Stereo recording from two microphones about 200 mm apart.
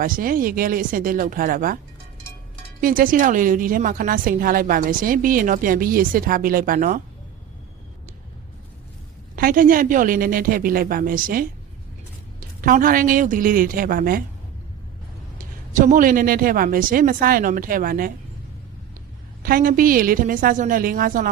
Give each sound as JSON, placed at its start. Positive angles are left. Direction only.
{"t": 0.0, "sound": "a woman's voice", "side_deg": -45}
{"t": 2.8, "sound": "a woman's voice", "side_deg": -45}
{"t": 9.3, "sound": "a woman's voice", "side_deg": -45}
{"t": 15.7, "sound": "a woman's voice", "side_deg": -40}
{"t": 19.4, "sound": "a woman's voice", "side_deg": -45}